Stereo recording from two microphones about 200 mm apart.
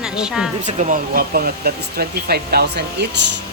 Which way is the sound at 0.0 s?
5° right (ahead or behind).